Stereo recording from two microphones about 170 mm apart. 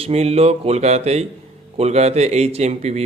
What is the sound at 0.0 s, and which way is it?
Speech, 35° right (ahead or behind).